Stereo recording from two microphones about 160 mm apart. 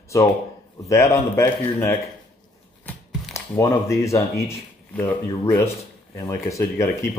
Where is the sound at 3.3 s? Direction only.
20° left (ahead or behind).